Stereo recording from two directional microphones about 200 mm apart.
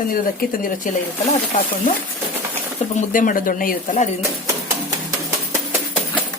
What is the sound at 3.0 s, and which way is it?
Speech, 40° left (ahead or behind).